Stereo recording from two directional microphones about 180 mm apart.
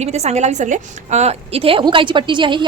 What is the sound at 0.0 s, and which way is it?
A woman's voice, 35° right (ahead or behind).